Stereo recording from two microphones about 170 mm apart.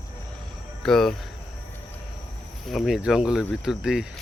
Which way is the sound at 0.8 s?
Centre (ahead or behind).